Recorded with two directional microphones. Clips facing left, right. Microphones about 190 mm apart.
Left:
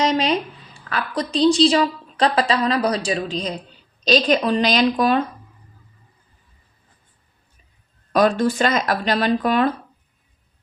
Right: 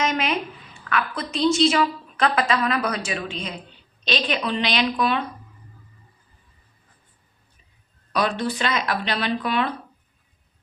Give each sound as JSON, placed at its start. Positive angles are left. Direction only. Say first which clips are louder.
{"t": 0.0, "sound": "a woman's voice", "louder": "left 5 dB", "side_deg": 35}
{"t": 8.1, "sound": "speech", "louder": "left 7 dB", "side_deg": 45}